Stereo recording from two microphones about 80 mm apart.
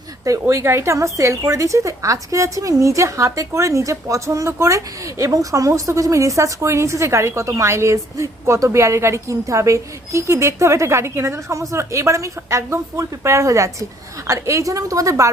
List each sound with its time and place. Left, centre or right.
0.3 s a woman's voice: right